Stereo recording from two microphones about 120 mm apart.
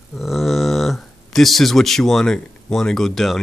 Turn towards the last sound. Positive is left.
turn(degrees=0)  # may be behind; listen again after turning